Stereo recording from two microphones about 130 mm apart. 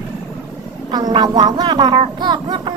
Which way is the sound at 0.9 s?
30° right (ahead or behind).